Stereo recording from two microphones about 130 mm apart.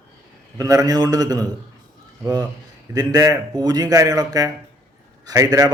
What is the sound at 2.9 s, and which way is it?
Speech, 30° right (ahead or behind).